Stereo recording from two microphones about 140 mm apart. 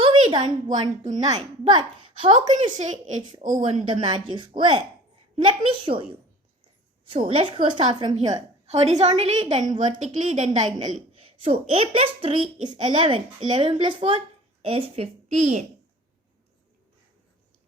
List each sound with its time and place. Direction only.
0.0 s a sound: 35° right (ahead or behind)
0.7 s a woman's voice: 55° right (ahead or behind)
1.4 s a woman's voice: 35° right (ahead or behind)
2.5 s a woman's voice: 60° right (ahead or behind)
4.0 s a woman's voice: 35° right (ahead or behind)
8.6 s a woman's voice: 50° right (ahead or behind)
10.9 s a woman's voice: 40° right (ahead or behind)